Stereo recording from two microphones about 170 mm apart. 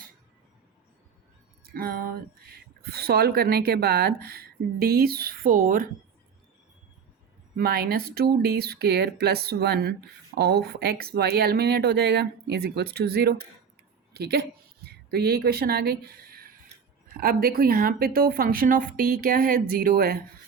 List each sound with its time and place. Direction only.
1.7 s speech: 60° right (ahead or behind)
7.5 s a woman's voice: 65° right (ahead or behind)